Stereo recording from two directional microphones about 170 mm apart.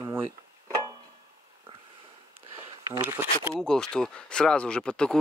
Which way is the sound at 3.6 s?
5° left (ahead or behind).